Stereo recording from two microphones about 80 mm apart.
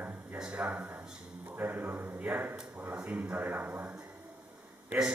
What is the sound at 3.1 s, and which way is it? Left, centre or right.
Speech, right.